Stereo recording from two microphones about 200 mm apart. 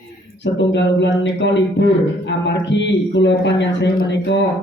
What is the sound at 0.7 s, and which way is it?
Speech, 60° left (ahead or behind).